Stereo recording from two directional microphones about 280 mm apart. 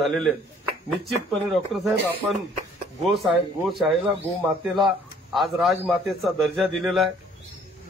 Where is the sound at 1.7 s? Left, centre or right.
Centre.